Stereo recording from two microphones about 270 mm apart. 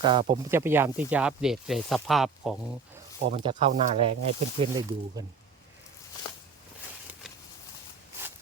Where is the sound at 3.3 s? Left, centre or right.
Right.